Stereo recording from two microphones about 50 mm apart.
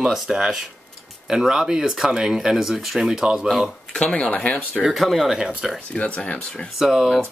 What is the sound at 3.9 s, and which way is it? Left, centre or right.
Speech, left.